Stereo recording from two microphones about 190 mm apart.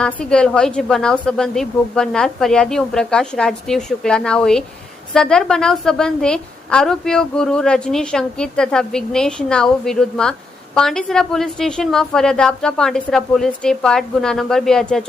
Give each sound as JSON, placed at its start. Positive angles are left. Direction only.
{"t": 0.0, "sound": "a woman's voice", "side_deg": 5}